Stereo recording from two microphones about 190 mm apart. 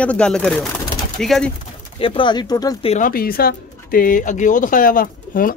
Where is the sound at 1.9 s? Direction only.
30° left (ahead or behind).